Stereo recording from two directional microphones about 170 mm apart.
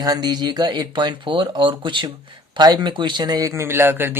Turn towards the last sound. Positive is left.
turn(degrees=-15)  # may be behind; listen again after turning